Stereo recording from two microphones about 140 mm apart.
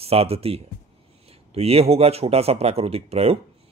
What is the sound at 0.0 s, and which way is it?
Speech, 45° right (ahead or behind).